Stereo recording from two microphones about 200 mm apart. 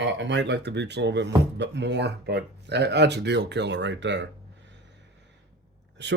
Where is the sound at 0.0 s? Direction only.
65° right (ahead or behind).